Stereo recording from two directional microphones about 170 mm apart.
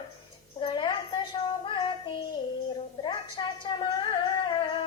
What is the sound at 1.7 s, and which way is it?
Music, 30° left (ahead or behind).